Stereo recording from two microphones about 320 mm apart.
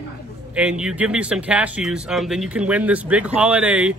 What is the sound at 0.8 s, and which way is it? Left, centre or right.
Speech, centre.